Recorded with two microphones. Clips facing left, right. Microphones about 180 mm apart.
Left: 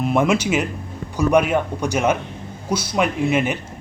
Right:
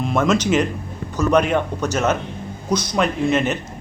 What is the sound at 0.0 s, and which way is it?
A man's voice, 10° left (ahead or behind).